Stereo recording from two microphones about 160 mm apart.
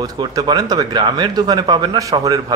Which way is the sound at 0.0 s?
25° right (ahead or behind).